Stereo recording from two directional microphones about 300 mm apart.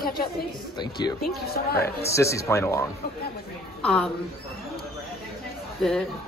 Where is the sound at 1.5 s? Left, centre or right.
Left.